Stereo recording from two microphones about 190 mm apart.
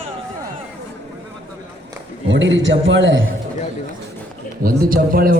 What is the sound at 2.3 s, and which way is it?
Speech, 75° right (ahead or behind).